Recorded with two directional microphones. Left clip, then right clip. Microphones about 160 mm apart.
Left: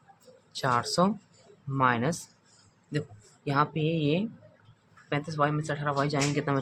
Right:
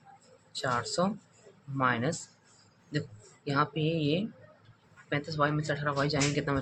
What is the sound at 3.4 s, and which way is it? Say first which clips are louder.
Speech: left 2 dB; 20° left (ahead or behind).